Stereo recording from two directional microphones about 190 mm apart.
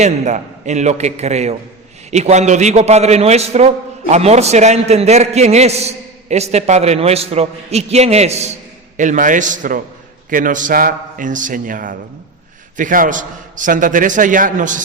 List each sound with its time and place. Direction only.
0.0 s a man's voice: 40° right (ahead or behind)